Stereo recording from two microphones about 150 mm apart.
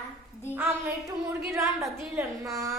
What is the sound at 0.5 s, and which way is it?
Speech, 15° right (ahead or behind).